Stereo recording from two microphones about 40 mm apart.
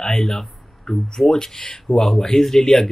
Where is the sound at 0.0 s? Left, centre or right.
Centre.